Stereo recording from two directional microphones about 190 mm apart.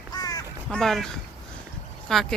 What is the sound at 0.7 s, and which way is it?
Speech, centre (ahead or behind).